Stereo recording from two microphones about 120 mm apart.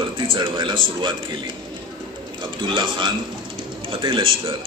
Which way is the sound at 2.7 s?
40° right (ahead or behind).